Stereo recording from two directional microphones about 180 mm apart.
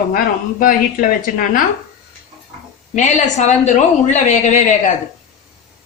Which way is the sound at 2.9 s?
40° left (ahead or behind).